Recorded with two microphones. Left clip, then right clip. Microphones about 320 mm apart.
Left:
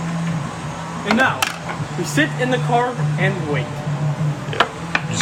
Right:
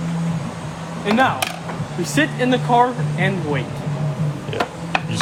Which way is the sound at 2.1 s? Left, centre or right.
Right.